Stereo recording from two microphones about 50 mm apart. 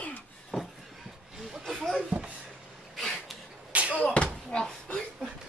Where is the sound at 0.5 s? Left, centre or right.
Centre.